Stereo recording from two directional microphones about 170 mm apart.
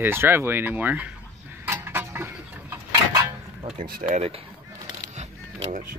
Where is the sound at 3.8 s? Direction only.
55° right (ahead or behind).